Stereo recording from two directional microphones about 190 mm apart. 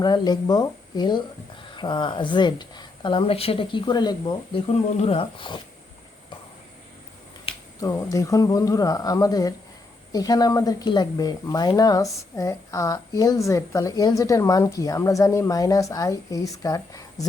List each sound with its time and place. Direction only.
0.0 s a woman's voice: 20° left (ahead or behind)
7.8 s a woman's voice: 15° left (ahead or behind)